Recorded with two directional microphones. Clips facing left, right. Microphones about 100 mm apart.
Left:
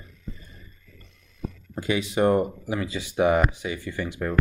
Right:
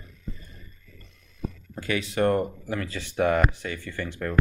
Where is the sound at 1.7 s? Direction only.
20° left (ahead or behind).